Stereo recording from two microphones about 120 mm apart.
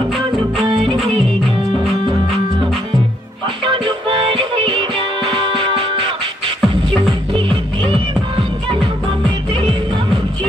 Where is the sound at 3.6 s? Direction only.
45° right (ahead or behind).